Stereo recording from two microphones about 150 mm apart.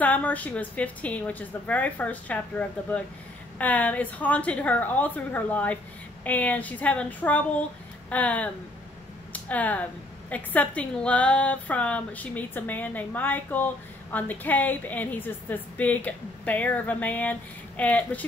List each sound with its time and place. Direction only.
0.0 s a woman's voice: 10° left (ahead or behind)